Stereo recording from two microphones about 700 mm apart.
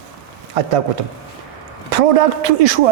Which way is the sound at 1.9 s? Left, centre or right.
Right.